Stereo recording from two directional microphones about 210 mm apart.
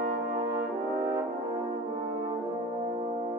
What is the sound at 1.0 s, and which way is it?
Brass instrument, 10° right (ahead or behind).